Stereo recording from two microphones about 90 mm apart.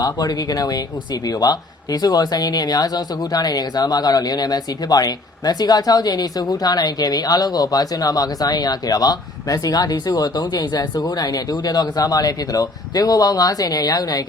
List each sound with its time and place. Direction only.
0.0 s speech: 45° left (ahead or behind)